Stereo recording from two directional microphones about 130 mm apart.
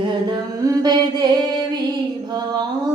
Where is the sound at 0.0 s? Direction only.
35° right (ahead or behind).